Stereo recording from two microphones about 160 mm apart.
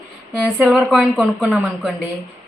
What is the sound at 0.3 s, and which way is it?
A woman's voice, centre (ahead or behind).